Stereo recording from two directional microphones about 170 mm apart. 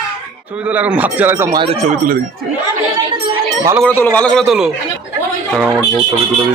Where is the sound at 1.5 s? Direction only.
35° right (ahead or behind).